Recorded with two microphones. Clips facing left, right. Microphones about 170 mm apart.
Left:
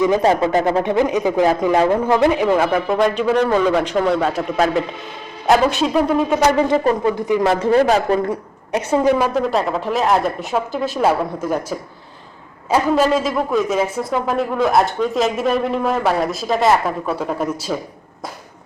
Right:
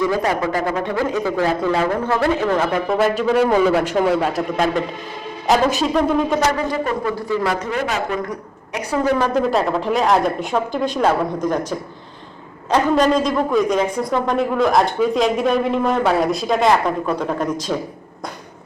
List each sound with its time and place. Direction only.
0.0 s a man's voice: 20° left (ahead or behind)
2.9 s speech: centre (ahead or behind)
7.0 s speech: 20° left (ahead or behind)
9.1 s speech: 5° left (ahead or behind)